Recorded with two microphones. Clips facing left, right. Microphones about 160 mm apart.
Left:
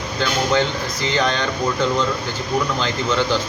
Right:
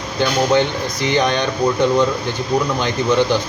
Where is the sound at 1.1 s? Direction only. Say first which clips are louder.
Right 3 dB; 15° right (ahead or behind).